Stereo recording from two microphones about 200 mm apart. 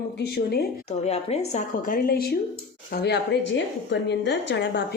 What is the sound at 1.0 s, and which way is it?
A woman's voice, 30° left (ahead or behind).